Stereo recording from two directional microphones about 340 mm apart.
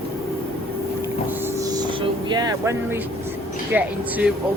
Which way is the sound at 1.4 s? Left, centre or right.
Centre.